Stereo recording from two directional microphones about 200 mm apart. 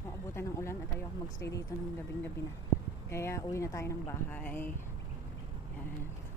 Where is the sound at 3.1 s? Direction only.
15° left (ahead or behind).